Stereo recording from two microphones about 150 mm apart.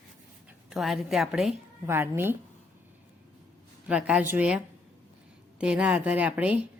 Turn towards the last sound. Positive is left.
turn(degrees=-10)  # may be behind; listen again after turning